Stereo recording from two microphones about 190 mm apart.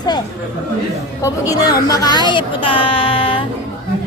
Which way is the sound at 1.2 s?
20° left (ahead or behind).